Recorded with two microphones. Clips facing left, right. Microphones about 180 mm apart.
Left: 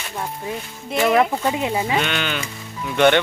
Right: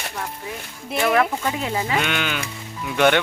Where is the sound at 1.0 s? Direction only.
20° left (ahead or behind).